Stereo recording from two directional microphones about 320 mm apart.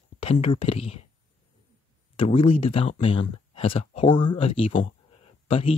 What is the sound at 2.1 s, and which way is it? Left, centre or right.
Speech, centre.